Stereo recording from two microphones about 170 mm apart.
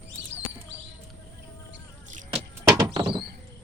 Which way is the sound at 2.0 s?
45° right (ahead or behind).